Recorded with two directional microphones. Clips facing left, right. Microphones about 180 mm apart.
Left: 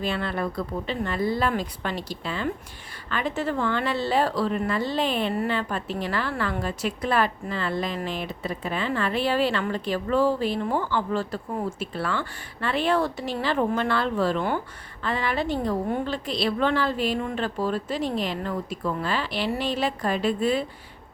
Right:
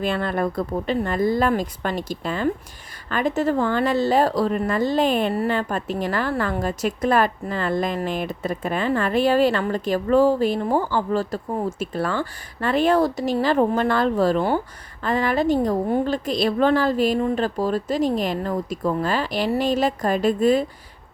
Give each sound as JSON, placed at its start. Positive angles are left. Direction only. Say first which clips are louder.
{"t": 0.0, "sound": "a woman's voice", "louder": "right 5 dB", "side_deg": -50}